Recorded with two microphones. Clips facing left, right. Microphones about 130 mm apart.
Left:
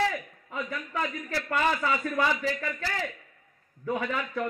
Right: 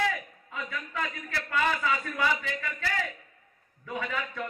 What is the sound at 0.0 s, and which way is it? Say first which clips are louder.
A man's voice: left 2 dB; 35° left (ahead or behind).